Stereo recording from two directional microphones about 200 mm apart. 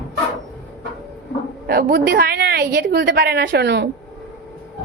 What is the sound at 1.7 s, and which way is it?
A woman's voice, 50° right (ahead or behind).